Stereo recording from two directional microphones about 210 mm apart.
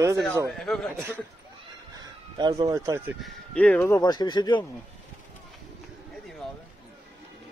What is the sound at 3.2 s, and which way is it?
Speech, 5° left (ahead or behind).